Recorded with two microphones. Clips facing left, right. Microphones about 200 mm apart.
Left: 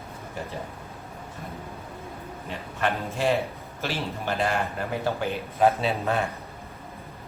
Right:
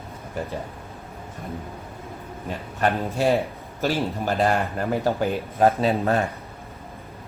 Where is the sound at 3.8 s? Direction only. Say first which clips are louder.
Right 7 dB; 40° right (ahead or behind).